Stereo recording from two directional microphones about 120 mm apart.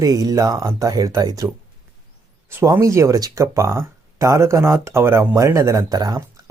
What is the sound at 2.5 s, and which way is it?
Speech, 20° right (ahead or behind).